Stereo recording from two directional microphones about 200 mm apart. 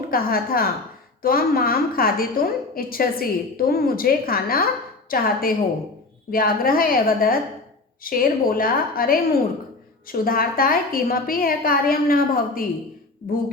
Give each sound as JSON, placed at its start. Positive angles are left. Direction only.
{"t": 0.1, "sound": "a woman's voice", "side_deg": 45}